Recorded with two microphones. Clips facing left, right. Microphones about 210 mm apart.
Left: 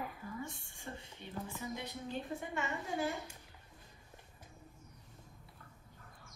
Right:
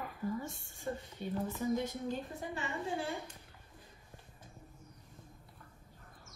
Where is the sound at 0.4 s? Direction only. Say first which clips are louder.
Right 2 dB; 45° right (ahead or behind).